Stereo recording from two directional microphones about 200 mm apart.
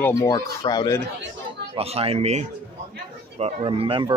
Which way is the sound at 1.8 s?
30° right (ahead or behind).